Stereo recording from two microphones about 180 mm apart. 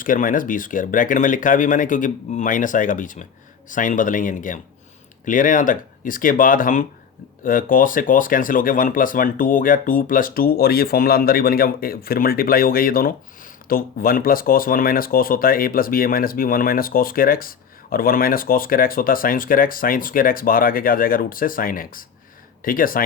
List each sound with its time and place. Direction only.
0.0 s speech: 50° left (ahead or behind)